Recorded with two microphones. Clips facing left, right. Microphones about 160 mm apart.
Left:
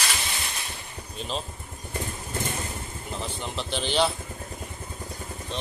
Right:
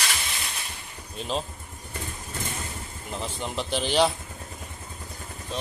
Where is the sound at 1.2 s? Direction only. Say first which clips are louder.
Right 3 dB; 10° right (ahead or behind).